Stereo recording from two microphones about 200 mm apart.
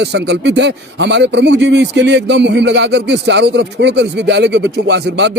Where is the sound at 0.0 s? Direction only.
60° right (ahead or behind).